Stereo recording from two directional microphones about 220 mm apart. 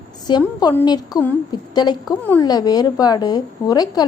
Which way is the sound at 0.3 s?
20° left (ahead or behind).